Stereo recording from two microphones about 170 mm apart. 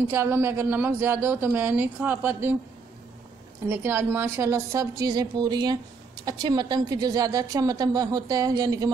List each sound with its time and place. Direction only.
0.1 s speech: 15° right (ahead or behind)
3.6 s a woman's voice: 15° right (ahead or behind)